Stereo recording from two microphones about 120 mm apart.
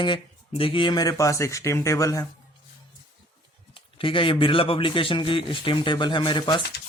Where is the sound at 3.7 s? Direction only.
45° left (ahead or behind).